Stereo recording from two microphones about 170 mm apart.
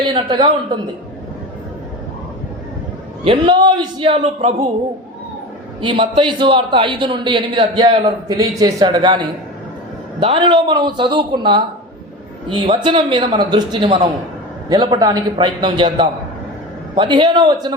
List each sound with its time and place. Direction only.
0.0 s a man's voice: 25° right (ahead or behind)
3.2 s a man's voice: 25° right (ahead or behind)
4.1 s speech: 40° right (ahead or behind)
5.8 s a man's voice: 30° right (ahead or behind)
10.3 s a man's voice: 25° right (ahead or behind)